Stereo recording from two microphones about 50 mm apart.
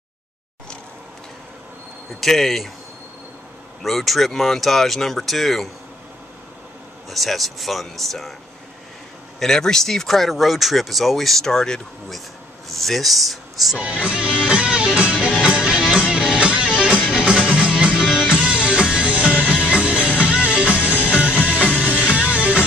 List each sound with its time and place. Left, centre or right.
2.1 s speech: centre
3.8 s speech: centre
7.1 s speech: centre
9.4 s speech: centre
13.7 s music: right
17.9 s music: centre
18.4 s music: right